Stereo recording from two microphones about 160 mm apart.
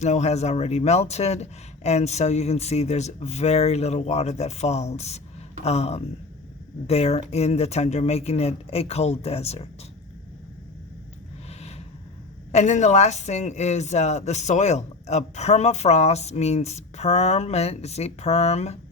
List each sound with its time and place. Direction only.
0.0 s a woman's voice: 45° left (ahead or behind)
12.5 s a woman's voice: 45° left (ahead or behind)